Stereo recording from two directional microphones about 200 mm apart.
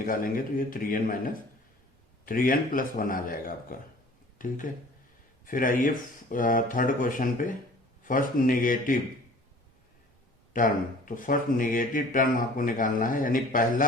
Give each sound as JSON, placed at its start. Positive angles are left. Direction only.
{"t": 0.0, "sound": "speech", "side_deg": 45}
{"t": 10.5, "sound": "speech", "side_deg": 40}